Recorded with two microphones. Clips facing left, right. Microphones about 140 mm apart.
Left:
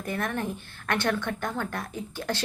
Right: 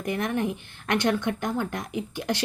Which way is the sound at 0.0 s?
15° right (ahead or behind).